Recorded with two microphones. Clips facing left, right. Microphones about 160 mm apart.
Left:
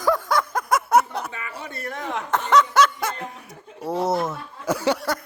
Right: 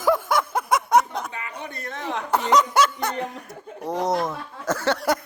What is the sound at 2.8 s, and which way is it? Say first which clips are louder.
Snicker: left 1 dB; 10° right (ahead or behind).